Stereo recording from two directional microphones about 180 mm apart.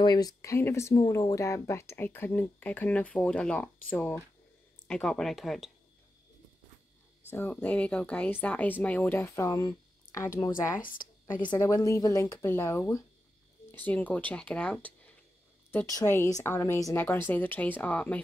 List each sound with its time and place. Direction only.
0.0 s speech: 20° left (ahead or behind); by 5.7 s centre (ahead or behind)
7.2 s speech: 10° left (ahead or behind)
10.8 s a woman's voice: 50° left (ahead or behind)
11.4 s speech: 20° left (ahead or behind)